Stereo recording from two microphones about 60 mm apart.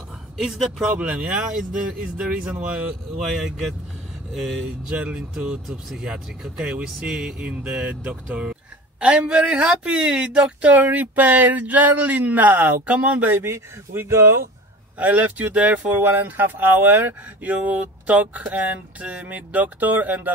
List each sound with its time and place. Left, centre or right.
0.4 s speech: centre
0.9 s speech: right
3.2 s speech: centre
4.6 s speech: centre
13.3 s speech: right
15.0 s speech: right